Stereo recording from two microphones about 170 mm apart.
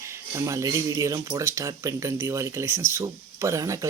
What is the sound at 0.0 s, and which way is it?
Speech, 15° right (ahead or behind).